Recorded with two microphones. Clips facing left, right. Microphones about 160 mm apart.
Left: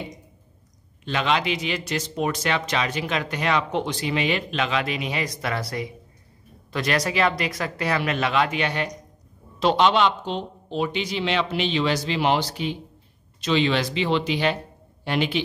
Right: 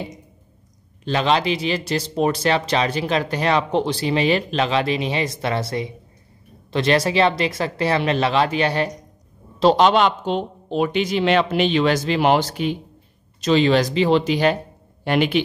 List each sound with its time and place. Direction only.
1.0 s a man's voice: 35° right (ahead or behind)
15.0 s speech: 55° right (ahead or behind)